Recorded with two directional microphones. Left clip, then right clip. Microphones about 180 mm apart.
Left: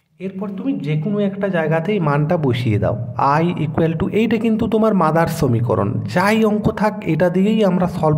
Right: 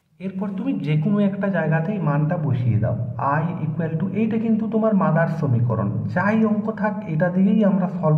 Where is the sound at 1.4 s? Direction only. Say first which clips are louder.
Left 4 dB; 30° left (ahead or behind).